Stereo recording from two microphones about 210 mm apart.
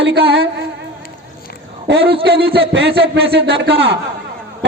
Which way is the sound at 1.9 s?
50° right (ahead or behind).